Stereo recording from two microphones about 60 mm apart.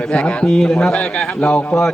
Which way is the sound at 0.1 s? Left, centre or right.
Centre.